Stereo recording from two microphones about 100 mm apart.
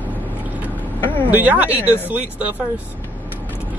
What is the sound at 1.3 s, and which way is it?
Speech, 15° right (ahead or behind).